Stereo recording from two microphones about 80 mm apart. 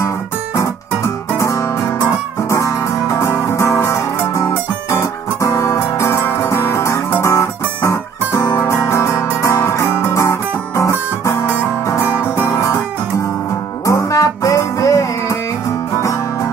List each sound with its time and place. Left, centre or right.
0.6 s music: left
7.2 s guitar: left
8.3 s music: left
13.8 s music: left